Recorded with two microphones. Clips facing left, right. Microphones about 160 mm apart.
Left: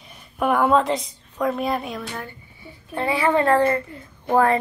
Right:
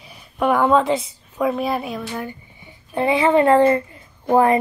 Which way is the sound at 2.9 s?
20° right (ahead or behind).